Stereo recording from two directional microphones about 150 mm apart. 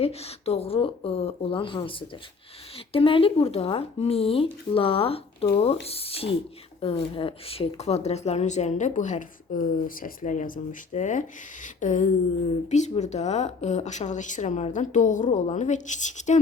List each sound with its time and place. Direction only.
0.0 s speech: 45° left (ahead or behind)